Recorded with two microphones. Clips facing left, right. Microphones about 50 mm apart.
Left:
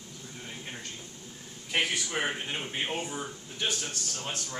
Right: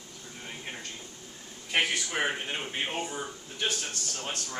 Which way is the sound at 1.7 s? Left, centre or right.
Centre.